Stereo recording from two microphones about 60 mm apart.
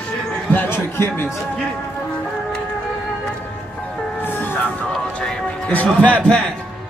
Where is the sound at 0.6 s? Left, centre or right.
Left.